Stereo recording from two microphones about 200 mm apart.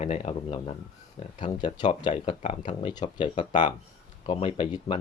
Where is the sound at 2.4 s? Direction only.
35° left (ahead or behind).